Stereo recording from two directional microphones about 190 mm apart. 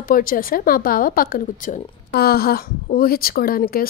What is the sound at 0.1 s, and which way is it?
A woman's voice, 50° left (ahead or behind).